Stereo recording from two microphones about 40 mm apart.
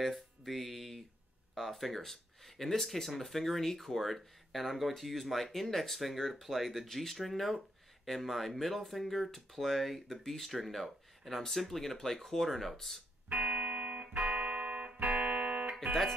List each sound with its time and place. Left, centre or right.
0.0 s music: centre
1.5 s speech: centre
13.3 s music: right